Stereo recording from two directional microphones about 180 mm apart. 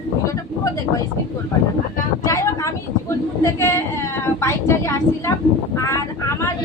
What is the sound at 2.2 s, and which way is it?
A woman's voice, 15° left (ahead or behind).